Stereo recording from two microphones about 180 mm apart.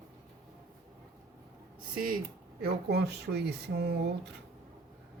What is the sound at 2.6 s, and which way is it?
Speech, 65° right (ahead or behind).